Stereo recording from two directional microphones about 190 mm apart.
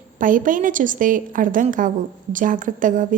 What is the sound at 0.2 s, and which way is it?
A woman's voice, 45° right (ahead or behind).